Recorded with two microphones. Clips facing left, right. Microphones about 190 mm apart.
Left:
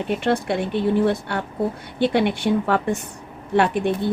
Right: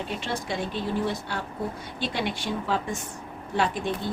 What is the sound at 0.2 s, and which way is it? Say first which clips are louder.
Speech: left 9 dB; 60° left (ahead or behind).